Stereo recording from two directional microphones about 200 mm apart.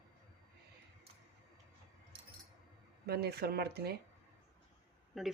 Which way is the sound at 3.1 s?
55° right (ahead or behind).